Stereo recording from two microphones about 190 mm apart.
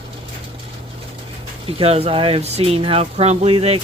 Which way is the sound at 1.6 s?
30° right (ahead or behind).